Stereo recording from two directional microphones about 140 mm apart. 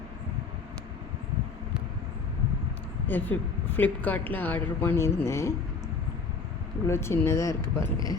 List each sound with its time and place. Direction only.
3.1 s a woman's voice: 15° left (ahead or behind)
6.8 s speech: 20° left (ahead or behind)